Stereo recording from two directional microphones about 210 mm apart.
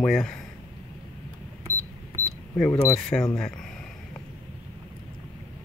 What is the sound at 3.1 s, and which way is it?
Speech, 15° left (ahead or behind).